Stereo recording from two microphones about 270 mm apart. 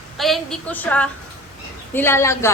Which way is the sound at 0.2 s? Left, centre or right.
Centre.